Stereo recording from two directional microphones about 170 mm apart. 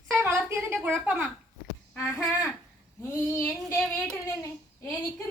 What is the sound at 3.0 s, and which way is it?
Child singing, 15° left (ahead or behind).